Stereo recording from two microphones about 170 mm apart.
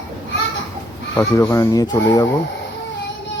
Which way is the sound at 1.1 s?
15° left (ahead or behind).